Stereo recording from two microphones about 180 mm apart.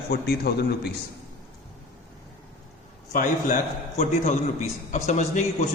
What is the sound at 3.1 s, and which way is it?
Speech, 45° left (ahead or behind).